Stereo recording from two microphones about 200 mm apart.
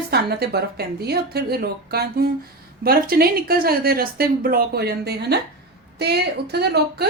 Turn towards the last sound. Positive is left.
turn(degrees=-55)  # may be behind; listen again after turning